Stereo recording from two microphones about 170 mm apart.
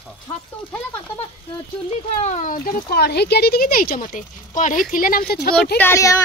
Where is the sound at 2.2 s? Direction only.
45° left (ahead or behind); by 5.5 s 65° left (ahead or behind).